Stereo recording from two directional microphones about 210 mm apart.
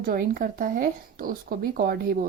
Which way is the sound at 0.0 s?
40° right (ahead or behind).